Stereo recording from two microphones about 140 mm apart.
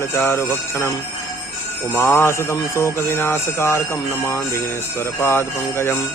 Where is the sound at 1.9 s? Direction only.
15° left (ahead or behind).